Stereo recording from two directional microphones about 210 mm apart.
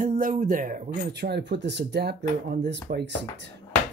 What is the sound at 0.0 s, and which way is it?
Speech, 40° right (ahead or behind).